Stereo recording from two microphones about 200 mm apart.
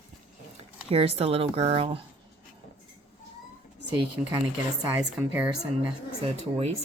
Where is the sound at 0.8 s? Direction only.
30° right (ahead or behind).